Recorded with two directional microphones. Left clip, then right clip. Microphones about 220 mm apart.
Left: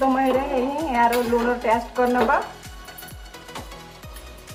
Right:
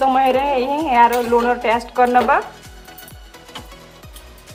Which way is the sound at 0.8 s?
30° right (ahead or behind).